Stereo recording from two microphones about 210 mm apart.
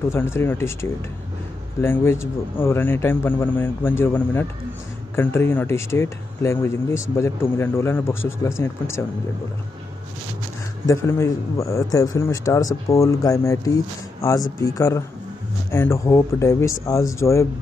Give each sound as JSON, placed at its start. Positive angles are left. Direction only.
{"t": 0.1, "sound": "a man's voice", "side_deg": 10}
{"t": 10.9, "sound": "a man's voice", "side_deg": 15}